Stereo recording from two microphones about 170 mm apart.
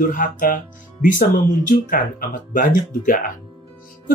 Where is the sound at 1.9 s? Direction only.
55° left (ahead or behind).